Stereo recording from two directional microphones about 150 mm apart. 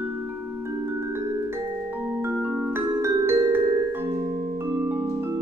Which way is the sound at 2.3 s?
10° right (ahead or behind).